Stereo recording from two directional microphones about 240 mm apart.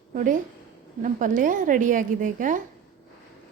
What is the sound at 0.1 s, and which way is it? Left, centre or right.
A woman's voice, right.